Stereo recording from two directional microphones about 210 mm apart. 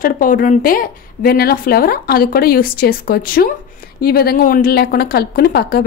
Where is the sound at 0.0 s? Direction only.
40° left (ahead or behind).